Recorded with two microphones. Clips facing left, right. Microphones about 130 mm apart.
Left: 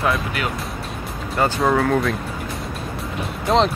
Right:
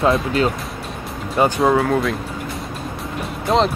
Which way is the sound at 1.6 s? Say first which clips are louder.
Right 2 dB; 5° right (ahead or behind).